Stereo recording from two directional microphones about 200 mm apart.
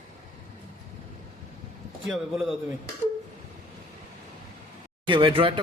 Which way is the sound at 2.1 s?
Centre (ahead or behind).